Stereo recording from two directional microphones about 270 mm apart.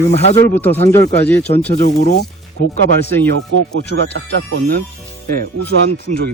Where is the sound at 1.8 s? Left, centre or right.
Left.